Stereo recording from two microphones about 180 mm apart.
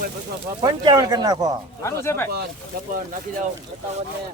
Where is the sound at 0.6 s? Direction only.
20° right (ahead or behind).